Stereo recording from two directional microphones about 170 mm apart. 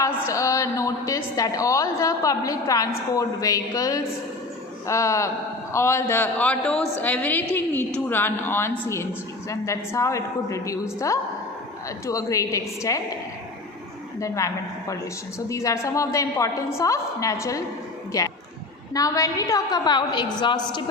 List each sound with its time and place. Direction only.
0.0 s a woman's voice: 20° left (ahead or behind)
14.2 s a woman's voice: 20° left (ahead or behind)